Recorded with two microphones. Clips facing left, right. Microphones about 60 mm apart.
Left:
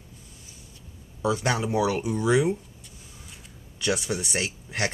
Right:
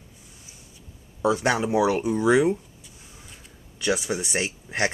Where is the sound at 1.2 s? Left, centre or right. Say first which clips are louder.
Right 3 dB; centre.